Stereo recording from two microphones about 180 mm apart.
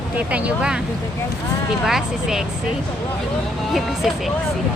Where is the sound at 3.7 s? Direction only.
Centre (ahead or behind).